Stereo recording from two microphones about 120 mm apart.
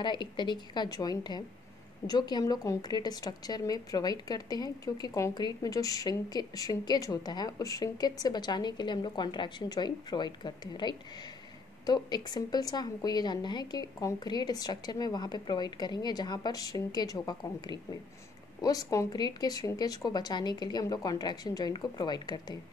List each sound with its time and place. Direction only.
0.0 s a woman's voice: 40° left (ahead or behind)